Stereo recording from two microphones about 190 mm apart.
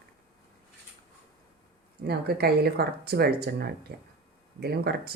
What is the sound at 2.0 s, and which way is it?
Speech, 55° right (ahead or behind).